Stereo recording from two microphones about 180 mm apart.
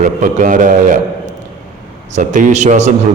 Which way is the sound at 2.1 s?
45° right (ahead or behind).